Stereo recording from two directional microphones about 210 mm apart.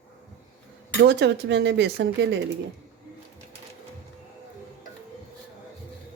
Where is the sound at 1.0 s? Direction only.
55° right (ahead or behind).